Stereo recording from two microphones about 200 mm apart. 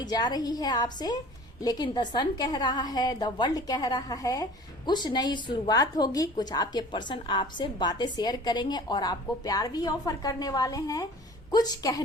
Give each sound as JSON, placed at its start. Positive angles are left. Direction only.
{"t": 0.0, "sound": "a woman's voice", "side_deg": 20}